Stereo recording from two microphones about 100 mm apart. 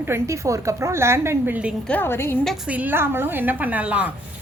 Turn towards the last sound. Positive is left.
turn(degrees=-15)  # may be behind; listen again after turning